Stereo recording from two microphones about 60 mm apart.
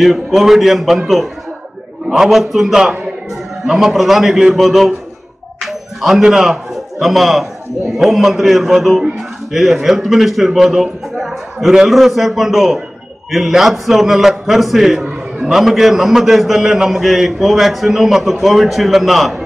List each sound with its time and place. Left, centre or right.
0.0 s a man's voice: centre
15.0 s a sound: centre
15.5 s a man's voice: centre